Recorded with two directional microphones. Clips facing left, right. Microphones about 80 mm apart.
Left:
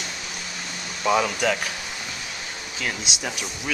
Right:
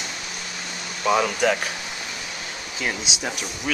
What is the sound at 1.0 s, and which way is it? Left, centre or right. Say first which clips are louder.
Speech: right 1 dB; centre.